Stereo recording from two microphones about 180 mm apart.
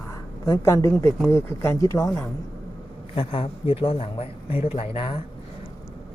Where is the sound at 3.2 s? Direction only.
30° left (ahead or behind).